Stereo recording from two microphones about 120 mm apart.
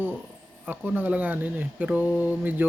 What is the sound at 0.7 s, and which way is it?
Speech, 15° right (ahead or behind).